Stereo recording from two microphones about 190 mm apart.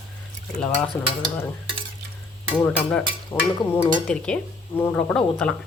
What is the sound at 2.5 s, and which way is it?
Speech, 5° left (ahead or behind).